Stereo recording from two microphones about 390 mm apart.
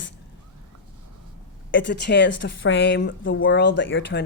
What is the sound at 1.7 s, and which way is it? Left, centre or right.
A woman's voice, left.